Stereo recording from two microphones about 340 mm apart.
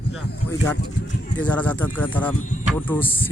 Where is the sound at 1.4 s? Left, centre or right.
Centre.